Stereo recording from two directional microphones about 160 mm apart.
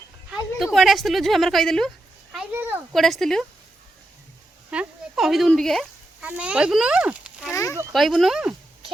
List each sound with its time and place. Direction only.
0.3 s speech: centre (ahead or behind)
4.7 s speech: 5° right (ahead or behind)
7.5 s a sound: 15° left (ahead or behind)
7.9 s speech: centre (ahead or behind)